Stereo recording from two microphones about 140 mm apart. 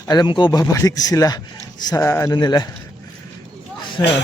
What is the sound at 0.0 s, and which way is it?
Speech, 30° left (ahead or behind).